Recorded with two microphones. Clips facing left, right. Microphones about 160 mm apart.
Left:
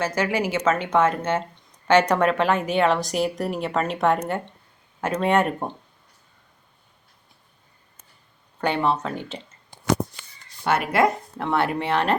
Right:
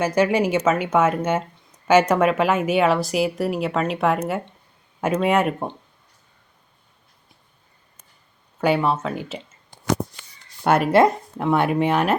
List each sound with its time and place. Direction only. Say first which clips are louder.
0.0 s speech: right 5 dB; 20° right (ahead or behind); by 5.7 s centre (ahead or behind)
8.6 s speech: right 3 dB; 5° right (ahead or behind)
10.6 s speech: right 4 dB; 45° right (ahead or behind)
11.3 s speech: right 5 dB; 15° right (ahead or behind)